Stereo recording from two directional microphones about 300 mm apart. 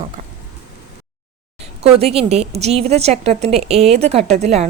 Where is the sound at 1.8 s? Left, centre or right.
Centre.